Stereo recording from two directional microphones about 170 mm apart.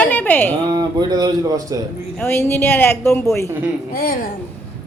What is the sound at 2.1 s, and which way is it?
A woman's voice, 10° left (ahead or behind).